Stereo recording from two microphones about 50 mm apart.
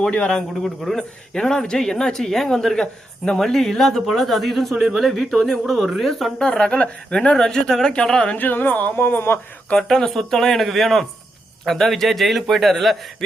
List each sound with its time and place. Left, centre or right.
0.1 s speech: centre
0.6 s speech: centre
6.4 s speech: centre
8.4 s speech: left
9.7 s speech: centre